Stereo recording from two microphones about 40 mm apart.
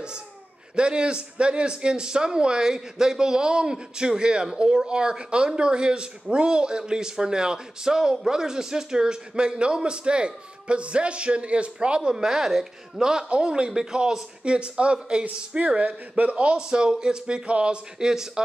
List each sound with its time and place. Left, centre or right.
0.7 s a man's voice: right
13.3 s a man's voice: right
17.9 s a man's voice: centre